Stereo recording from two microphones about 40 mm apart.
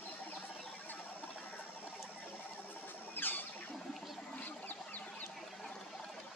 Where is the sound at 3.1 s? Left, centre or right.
Left.